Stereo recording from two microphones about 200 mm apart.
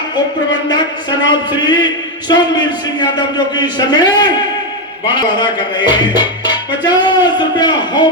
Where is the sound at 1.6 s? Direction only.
20° left (ahead or behind).